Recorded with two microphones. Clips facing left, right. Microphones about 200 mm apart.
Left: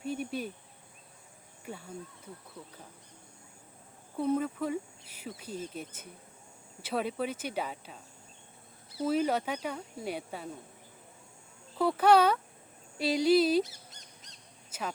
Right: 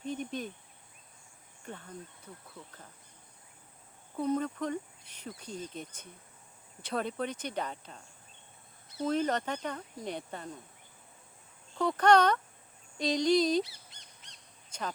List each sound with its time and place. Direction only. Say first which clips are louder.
0.0 s cricket: left 2 dB; 10° left (ahead or behind)
1.6 s speech: left 2 dB; 10° left (ahead or behind)
4.2 s speech: left 1 dB; 5° left (ahead or behind)
11.7 s speech: left 1 dB; 5° left (ahead or behind)
13.7 s bird: left 4 dB; 40° left (ahead or behind)
14.7 s speech: left 1 dB; 5° left (ahead or behind)